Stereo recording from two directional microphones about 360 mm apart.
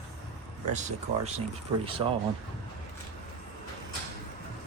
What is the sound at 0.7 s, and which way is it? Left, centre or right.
Speech, centre.